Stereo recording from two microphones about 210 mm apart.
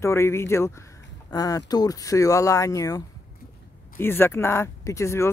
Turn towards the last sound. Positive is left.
turn(degrees=10)  # may be behind; listen again after turning